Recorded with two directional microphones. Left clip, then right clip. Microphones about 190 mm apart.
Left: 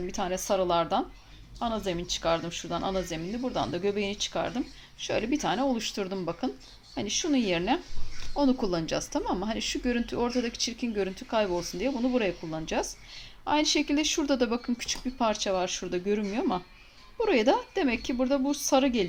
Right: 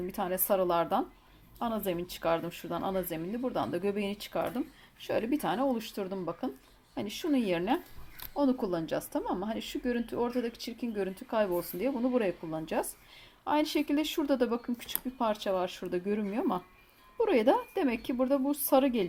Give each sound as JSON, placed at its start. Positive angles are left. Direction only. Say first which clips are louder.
{"t": 0.1, "sound": "speech", "louder": "left 1 dB", "side_deg": -20}